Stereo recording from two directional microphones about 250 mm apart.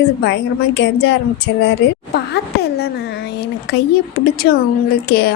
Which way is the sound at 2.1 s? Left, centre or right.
Left.